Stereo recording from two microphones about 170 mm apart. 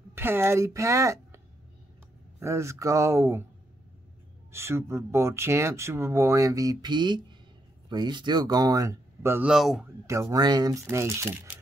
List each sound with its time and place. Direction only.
0.1 s a woman's voice: 15° right (ahead or behind)
2.4 s speech: 15° right (ahead or behind)
4.5 s speech: 15° right (ahead or behind)
9.5 s a man's voice: centre (ahead or behind)
10.0 s speech: 15° right (ahead or behind)